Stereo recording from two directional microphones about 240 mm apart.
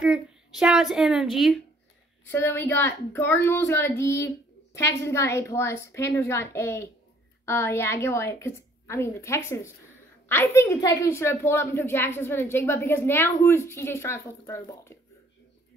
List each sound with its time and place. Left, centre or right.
0.0 s a child's voice: centre